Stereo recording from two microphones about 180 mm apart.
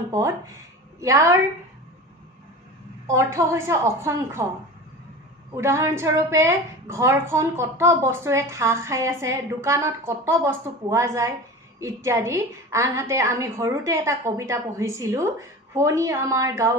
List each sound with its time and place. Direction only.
1.0 s a woman's voice: 15° right (ahead or behind)
3.1 s a woman's voice: 15° right (ahead or behind)
5.6 s a woman's voice: 15° right (ahead or behind)